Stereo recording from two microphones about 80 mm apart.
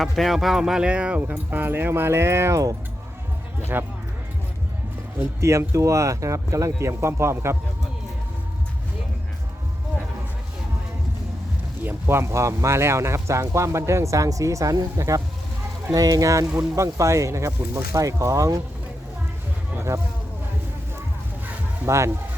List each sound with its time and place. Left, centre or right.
0.0 s speech: centre
1.5 s speech: right
3.7 s speech: right
5.4 s speech: right
11.8 s speech: right
21.8 s speech: right